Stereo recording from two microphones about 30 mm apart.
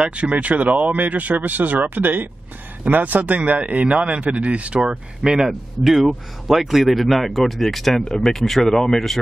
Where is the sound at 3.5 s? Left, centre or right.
Right.